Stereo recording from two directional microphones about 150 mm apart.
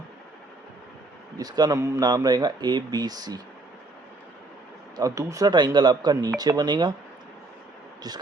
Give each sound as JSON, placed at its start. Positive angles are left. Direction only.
{"t": 1.4, "sound": "speech", "side_deg": -25}
{"t": 4.9, "sound": "speech", "side_deg": -20}